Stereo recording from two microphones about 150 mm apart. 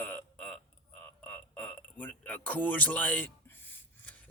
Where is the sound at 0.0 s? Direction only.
10° left (ahead or behind).